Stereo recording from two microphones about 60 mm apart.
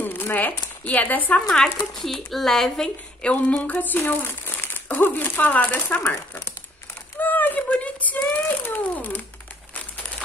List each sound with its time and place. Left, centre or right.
0.0 s speech: left
2.0 s a woman's voice: centre
3.3 s speech: left
7.2 s a sound: left
8.6 s speech: left